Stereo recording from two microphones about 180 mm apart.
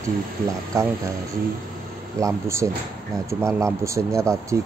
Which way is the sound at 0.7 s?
20° right (ahead or behind).